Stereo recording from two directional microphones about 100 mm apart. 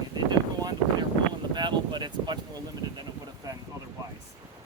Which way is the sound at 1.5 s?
50° right (ahead or behind).